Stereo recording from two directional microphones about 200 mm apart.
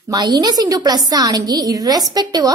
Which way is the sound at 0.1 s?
20° right (ahead or behind).